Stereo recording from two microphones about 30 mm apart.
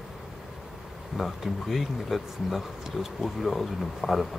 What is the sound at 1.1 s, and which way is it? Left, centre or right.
Speech, centre.